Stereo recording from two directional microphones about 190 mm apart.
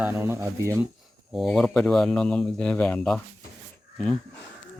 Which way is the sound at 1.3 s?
Centre (ahead or behind).